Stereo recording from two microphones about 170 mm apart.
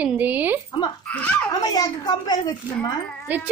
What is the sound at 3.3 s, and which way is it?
Speech, 10° right (ahead or behind).